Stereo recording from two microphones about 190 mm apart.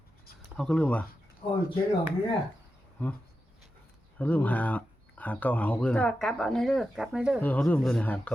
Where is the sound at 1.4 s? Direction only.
35° left (ahead or behind).